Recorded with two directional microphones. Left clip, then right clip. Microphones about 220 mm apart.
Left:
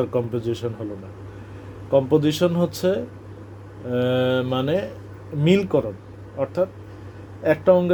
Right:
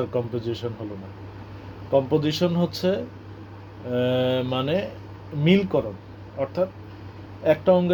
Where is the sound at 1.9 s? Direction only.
25° left (ahead or behind).